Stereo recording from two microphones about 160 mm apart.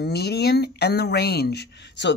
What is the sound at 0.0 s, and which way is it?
Speech, 90° left.